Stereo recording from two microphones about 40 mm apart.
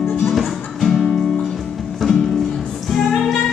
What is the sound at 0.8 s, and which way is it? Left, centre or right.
Music, centre.